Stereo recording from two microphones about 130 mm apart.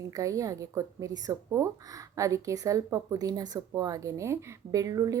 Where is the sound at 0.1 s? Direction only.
25° right (ahead or behind).